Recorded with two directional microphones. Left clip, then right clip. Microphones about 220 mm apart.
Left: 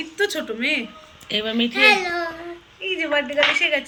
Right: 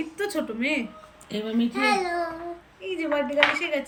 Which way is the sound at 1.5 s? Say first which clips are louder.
Left 2 dB; 25° left (ahead or behind).